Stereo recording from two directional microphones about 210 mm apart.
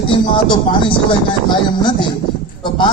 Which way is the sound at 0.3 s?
25° left (ahead or behind).